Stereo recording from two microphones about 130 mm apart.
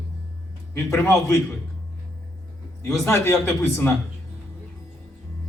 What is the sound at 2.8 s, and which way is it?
Speech, 20° left (ahead or behind).